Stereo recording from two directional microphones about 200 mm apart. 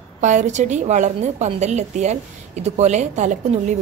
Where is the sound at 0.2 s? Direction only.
35° right (ahead or behind).